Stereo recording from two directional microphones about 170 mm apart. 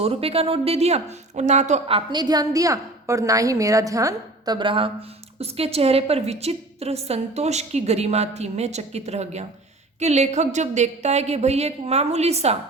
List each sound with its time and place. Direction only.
0.0 s a woman's voice: 35° right (ahead or behind)